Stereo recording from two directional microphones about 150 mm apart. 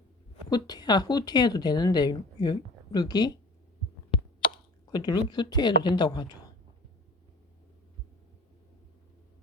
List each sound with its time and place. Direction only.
0.5 s speech: 25° left (ahead or behind)